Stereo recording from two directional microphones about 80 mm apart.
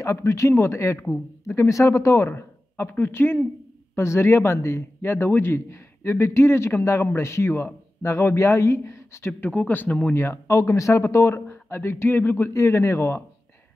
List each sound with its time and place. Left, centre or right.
0.0 s speech: left
9.7 s speech: left
10.1 s speech: left
11.4 s speech: left